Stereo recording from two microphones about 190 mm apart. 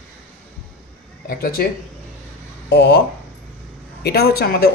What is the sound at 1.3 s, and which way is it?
Speech, 50° left (ahead or behind).